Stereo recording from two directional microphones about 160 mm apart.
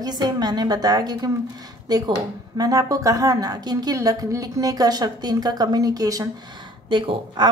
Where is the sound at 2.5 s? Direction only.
20° right (ahead or behind).